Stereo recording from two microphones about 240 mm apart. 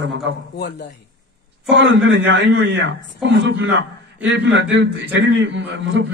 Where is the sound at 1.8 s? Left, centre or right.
Right.